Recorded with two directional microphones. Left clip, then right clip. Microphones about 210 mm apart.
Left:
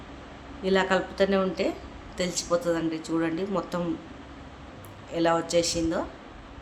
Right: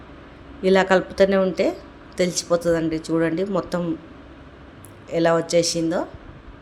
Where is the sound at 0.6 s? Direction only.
30° right (ahead or behind).